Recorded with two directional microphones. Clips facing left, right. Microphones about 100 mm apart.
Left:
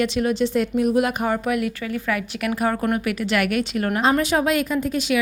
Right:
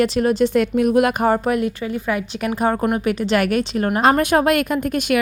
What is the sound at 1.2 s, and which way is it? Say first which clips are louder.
A woman's voice: right 4 dB; 35° right (ahead or behind).